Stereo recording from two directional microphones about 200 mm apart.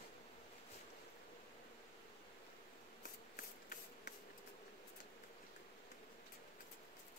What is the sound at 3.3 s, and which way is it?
Rub, 50° left (ahead or behind).